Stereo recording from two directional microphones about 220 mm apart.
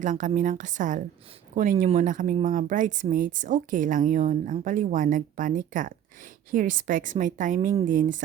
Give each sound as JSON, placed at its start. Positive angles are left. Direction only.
{"t": 0.0, "sound": "speech", "side_deg": -35}